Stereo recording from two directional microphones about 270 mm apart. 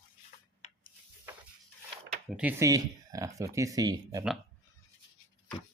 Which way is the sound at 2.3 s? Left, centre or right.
Centre.